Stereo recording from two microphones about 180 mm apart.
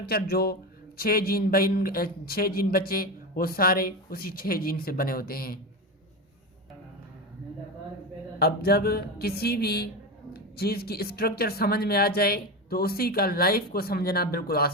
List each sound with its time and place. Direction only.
0.0 s speech: 60° left (ahead or behind)
8.4 s speech: 60° left (ahead or behind)